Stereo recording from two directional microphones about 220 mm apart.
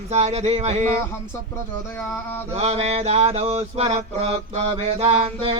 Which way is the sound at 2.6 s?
30° right (ahead or behind).